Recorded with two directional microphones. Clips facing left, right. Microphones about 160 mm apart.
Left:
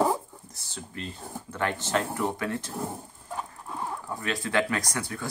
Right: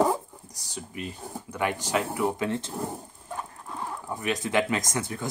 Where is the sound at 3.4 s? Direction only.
10° left (ahead or behind).